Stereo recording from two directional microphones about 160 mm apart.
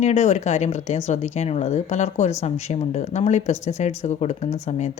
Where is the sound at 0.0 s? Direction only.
45° left (ahead or behind).